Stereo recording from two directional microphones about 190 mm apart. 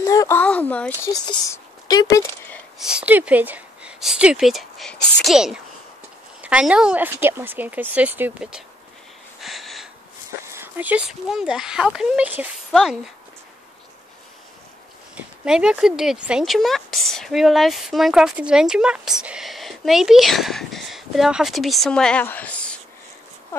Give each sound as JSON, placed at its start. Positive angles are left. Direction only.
{"t": 0.0, "sound": "a sound", "side_deg": 15}
{"t": 1.1, "sound": "speech", "side_deg": 20}
{"t": 2.8, "sound": "speech", "side_deg": -5}
{"t": 9.4, "sound": "a sound", "side_deg": 0}
{"t": 10.4, "sound": "speech", "side_deg": -15}
{"t": 15.1, "sound": "speech", "side_deg": -5}